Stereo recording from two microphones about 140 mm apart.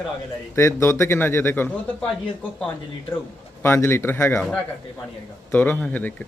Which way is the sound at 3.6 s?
15° left (ahead or behind).